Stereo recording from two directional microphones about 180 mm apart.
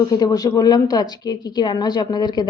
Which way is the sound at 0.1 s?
20° left (ahead or behind).